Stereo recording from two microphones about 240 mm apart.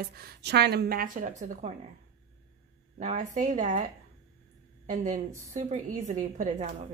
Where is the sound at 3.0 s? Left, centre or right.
Right.